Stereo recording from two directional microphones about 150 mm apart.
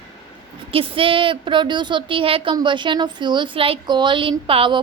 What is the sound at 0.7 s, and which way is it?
Speech, 35° right (ahead or behind).